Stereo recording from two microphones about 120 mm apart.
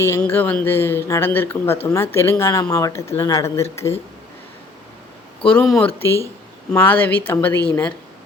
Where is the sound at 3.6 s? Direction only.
60° left (ahead or behind).